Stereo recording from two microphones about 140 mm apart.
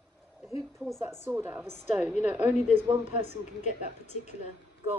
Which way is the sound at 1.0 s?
15° right (ahead or behind).